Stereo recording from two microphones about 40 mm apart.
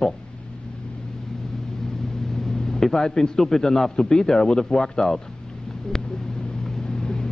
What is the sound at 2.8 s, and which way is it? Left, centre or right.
A man's voice, centre.